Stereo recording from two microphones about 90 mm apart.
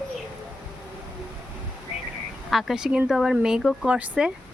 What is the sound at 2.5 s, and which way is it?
Speech, centre (ahead or behind).